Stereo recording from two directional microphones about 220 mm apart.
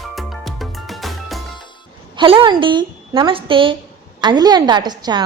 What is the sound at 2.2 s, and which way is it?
A woman's voice, 20° right (ahead or behind).